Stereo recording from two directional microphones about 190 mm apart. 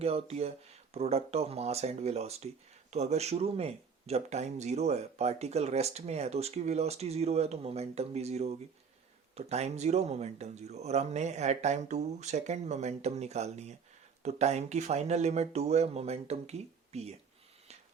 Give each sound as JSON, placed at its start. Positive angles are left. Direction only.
{"t": 0.0, "sound": "speech", "side_deg": -30}